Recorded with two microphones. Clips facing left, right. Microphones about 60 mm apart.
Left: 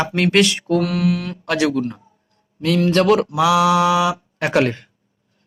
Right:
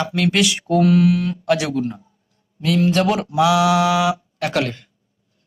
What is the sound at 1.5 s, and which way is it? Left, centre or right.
Speech, centre.